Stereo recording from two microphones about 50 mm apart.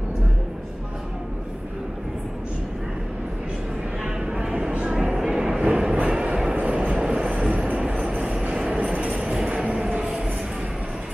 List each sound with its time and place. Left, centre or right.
4.0 s vehicle: centre
4.9 s train: centre
6.5 s train: right
7.0 s train: centre
8.2 s train: centre
8.5 s a sound: right